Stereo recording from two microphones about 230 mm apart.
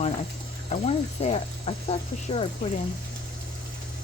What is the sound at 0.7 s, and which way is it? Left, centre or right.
Speech, left.